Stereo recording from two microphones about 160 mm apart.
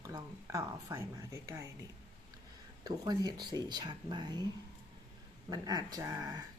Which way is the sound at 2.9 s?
25° right (ahead or behind).